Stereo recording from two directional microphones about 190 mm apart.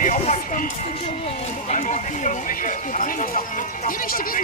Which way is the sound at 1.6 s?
40° left (ahead or behind).